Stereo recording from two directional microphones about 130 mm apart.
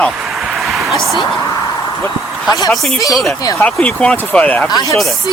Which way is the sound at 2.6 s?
Centre (ahead or behind).